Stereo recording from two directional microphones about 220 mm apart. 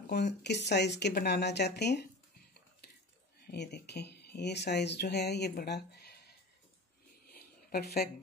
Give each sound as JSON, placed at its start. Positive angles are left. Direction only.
{"t": 0.0, "sound": "speech", "side_deg": 50}
{"t": 3.4, "sound": "speech", "side_deg": 50}
{"t": 7.2, "sound": "a sound", "side_deg": 45}